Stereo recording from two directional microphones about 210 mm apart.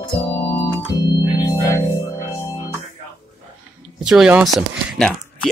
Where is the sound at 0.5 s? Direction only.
15° left (ahead or behind).